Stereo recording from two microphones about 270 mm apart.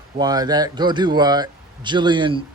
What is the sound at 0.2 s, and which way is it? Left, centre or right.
Speech, centre.